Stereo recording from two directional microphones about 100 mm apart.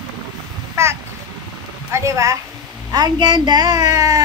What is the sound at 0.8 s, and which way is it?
A child's voice, 30° right (ahead or behind).